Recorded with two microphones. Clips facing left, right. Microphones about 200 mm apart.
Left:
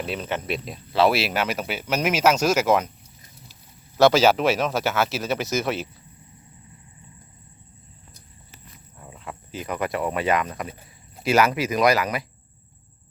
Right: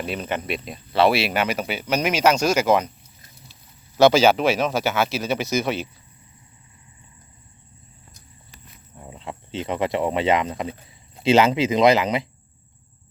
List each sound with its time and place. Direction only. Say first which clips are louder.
0.0 s speech: right 1 dB; centre (ahead or behind)
3.9 s speech: right 1 dB; centre (ahead or behind)
9.0 s speech: right 3 dB; 25° right (ahead or behind)